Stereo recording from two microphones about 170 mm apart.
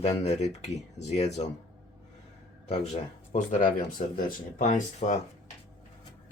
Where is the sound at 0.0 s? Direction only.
40° left (ahead or behind).